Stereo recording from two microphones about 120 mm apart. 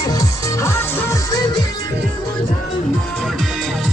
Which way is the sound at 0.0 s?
30° left (ahead or behind).